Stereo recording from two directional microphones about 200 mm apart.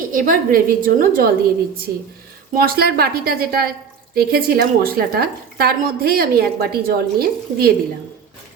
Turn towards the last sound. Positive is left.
turn(degrees=-50)  # may be behind; listen again after turning